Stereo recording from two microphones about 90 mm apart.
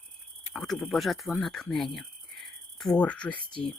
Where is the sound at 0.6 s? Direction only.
5° left (ahead or behind).